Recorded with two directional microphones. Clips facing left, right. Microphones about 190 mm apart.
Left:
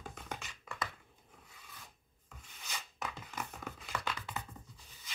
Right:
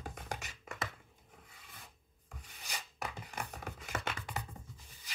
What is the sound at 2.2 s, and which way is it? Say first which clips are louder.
Rub: right 1 dB; 35° right (ahead or behind).